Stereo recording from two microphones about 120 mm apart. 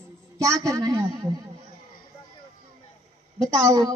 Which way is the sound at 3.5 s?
30° right (ahead or behind).